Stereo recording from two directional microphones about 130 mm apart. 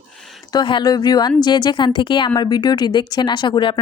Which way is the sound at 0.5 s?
35° left (ahead or behind).